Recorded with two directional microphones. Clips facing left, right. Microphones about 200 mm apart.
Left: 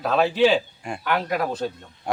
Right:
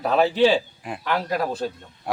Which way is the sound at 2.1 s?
Centre (ahead or behind).